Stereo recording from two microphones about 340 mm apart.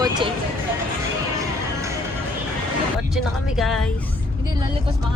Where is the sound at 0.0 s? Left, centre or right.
Centre.